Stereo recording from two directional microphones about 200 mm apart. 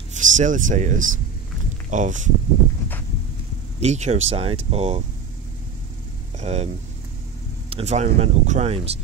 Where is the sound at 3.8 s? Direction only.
35° right (ahead or behind).